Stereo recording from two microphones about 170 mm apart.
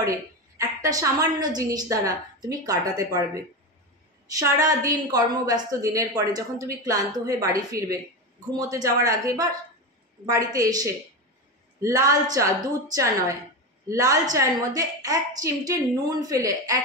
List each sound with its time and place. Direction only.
0.6 s a woman's voice: 20° right (ahead or behind)